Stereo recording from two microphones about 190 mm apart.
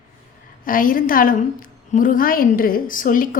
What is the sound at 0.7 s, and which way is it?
A woman's voice, 45° left (ahead or behind).